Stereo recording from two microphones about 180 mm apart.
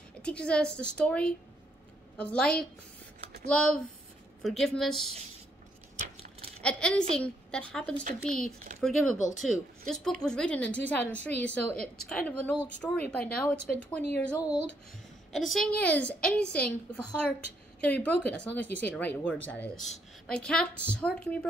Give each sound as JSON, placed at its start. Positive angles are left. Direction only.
{"t": 0.2, "sound": "a woman's voice", "side_deg": 5}
{"t": 6.6, "sound": "a woman's voice", "side_deg": 5}
{"t": 8.0, "sound": "speech", "side_deg": -45}
{"t": 8.8, "sound": "a woman's voice", "side_deg": 0}
{"t": 15.5, "sound": "a woman's voice", "side_deg": 5}